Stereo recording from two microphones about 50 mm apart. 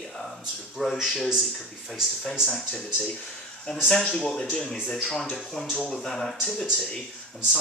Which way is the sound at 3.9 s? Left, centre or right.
Centre.